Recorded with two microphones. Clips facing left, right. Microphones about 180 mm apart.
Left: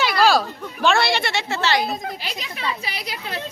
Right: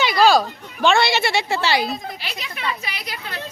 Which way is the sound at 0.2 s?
Centre (ahead or behind).